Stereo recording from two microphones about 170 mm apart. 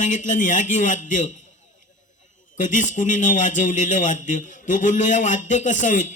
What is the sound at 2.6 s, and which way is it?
A man's voice, 50° left (ahead or behind).